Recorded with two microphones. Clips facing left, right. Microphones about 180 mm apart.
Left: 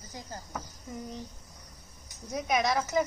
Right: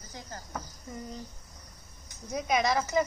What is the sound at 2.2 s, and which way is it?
Speech, centre (ahead or behind).